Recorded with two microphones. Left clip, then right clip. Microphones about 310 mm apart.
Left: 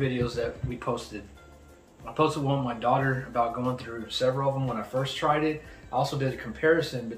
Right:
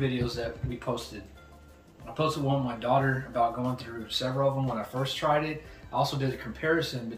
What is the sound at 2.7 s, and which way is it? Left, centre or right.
Speech, centre.